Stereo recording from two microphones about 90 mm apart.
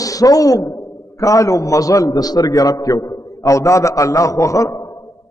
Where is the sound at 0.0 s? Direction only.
40° left (ahead or behind).